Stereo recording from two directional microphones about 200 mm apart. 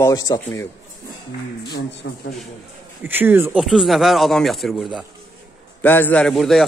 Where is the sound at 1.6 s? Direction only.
55° left (ahead or behind).